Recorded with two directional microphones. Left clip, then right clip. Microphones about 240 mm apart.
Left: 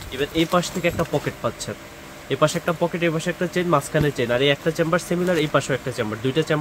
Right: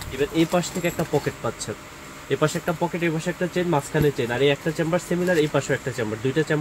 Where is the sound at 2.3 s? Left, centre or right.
Centre.